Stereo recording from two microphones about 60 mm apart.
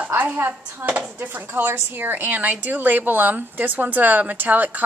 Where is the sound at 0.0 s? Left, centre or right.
Right.